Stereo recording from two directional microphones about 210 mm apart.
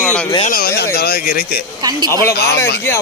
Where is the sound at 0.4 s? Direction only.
45° left (ahead or behind).